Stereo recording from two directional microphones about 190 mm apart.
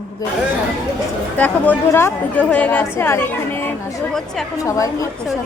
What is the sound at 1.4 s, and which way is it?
A woman's voice, 10° left (ahead or behind).